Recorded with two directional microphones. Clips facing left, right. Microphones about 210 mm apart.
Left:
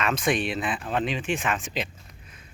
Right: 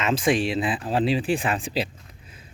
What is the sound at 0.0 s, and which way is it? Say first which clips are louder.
Speech: right 3 dB; 30° right (ahead or behind).